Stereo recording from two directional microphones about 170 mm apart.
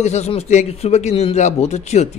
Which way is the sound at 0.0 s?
40° left (ahead or behind).